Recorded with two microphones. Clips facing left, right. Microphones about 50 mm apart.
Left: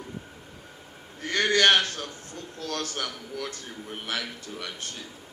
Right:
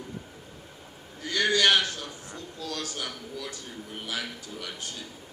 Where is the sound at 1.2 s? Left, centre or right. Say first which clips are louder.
Left 2 dB; left.